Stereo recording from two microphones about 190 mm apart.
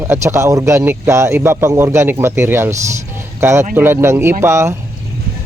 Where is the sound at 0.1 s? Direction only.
15° right (ahead or behind).